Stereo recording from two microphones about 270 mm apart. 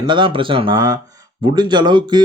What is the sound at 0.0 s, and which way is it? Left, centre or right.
Speech, centre.